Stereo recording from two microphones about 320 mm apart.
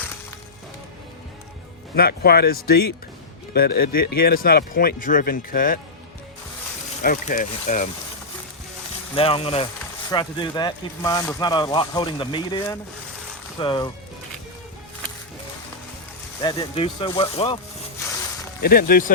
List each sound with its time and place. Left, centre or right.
2.0 s speech: left
7.0 s speech: left
9.1 s speech: centre
16.4 s speech: centre
18.6 s speech: left